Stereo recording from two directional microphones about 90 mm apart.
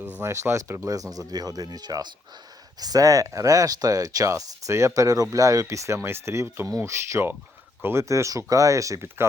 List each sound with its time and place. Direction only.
0.2 s speech: 30° right (ahead or behind)